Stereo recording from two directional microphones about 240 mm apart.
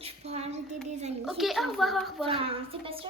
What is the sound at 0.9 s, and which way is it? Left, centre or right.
Child singing, right.